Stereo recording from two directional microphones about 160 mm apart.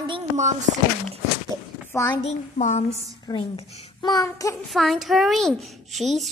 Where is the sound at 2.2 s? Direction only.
45° left (ahead or behind).